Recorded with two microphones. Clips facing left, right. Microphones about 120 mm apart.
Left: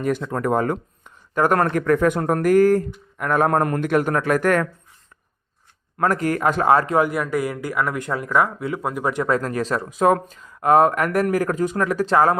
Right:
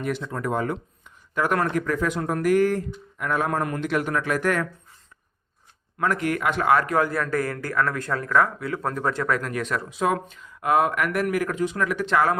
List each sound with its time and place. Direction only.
0.2 s speech: 55° left (ahead or behind)
6.0 s speech: 40° left (ahead or behind)